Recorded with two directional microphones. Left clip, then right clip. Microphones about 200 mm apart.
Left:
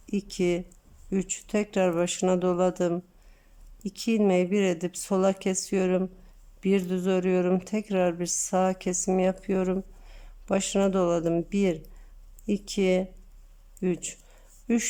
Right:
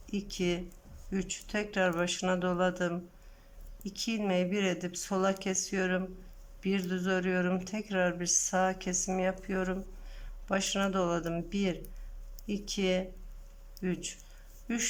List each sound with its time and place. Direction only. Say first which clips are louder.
0.0 s speech: left 6 dB; 20° left (ahead or behind)